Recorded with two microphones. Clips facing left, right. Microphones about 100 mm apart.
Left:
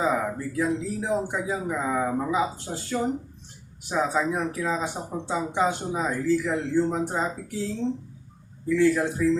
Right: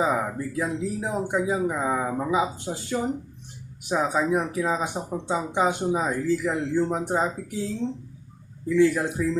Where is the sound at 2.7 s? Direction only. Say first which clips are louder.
Right 2 dB; 5° right (ahead or behind).